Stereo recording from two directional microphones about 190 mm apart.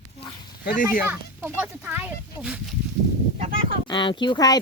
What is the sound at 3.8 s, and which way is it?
Speech, 25° left (ahead or behind).